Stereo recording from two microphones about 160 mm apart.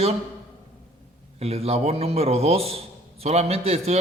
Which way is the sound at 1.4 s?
40° right (ahead or behind).